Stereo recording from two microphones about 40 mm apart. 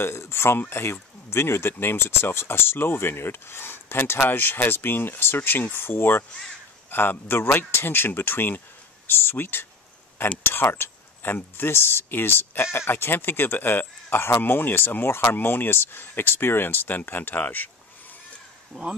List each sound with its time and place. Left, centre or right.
0.0 s speech: left
18.7 s speech: right